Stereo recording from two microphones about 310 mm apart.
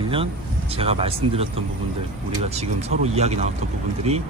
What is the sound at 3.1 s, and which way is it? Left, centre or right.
Speech, right.